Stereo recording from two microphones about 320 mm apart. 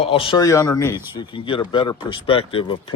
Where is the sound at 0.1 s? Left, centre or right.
Centre.